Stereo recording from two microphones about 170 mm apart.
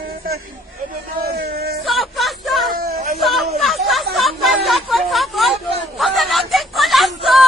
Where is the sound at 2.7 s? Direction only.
60° right (ahead or behind).